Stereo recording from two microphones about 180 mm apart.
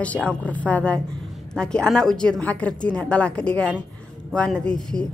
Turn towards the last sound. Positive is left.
turn(degrees=5)  # may be behind; listen again after turning